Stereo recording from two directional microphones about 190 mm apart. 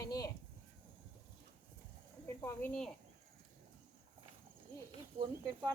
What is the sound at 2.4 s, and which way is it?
Speech, 10° left (ahead or behind).